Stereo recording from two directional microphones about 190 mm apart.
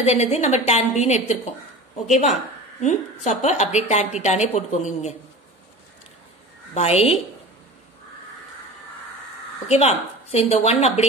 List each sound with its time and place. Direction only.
0.0 s a woman's voice: 35° left (ahead or behind)
6.7 s a woman's voice: 35° left (ahead or behind)
9.7 s a woman's voice: 35° left (ahead or behind)